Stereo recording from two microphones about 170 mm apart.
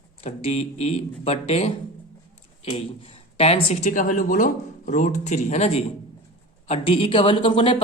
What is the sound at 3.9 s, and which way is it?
Speech, 50° left (ahead or behind).